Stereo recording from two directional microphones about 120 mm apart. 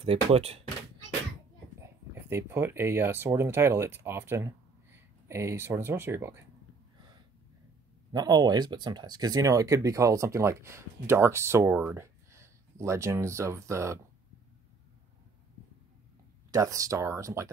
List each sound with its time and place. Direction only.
0.0 s speech: 55° right (ahead or behind)
1.8 s speech: 20° right (ahead or behind)
8.1 s speech: 35° right (ahead or behind)
16.5 s speech: 30° right (ahead or behind)